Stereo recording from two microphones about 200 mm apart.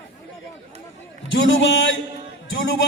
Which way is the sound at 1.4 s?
70° left (ahead or behind).